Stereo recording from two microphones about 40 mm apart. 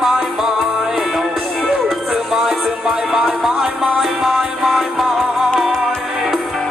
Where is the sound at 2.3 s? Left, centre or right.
Centre.